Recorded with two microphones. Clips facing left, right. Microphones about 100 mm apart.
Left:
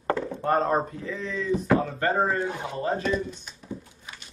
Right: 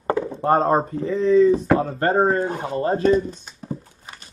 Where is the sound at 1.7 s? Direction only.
40° right (ahead or behind).